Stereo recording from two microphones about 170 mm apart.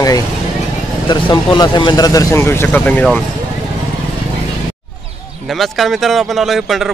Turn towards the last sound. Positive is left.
turn(degrees=0)  # may be behind; listen again after turning